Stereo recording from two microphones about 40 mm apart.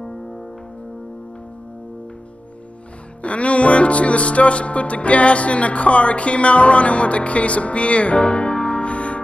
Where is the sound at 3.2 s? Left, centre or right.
Left.